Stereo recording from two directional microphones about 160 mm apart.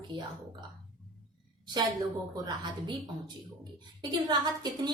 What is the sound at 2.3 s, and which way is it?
Speech, 25° right (ahead or behind).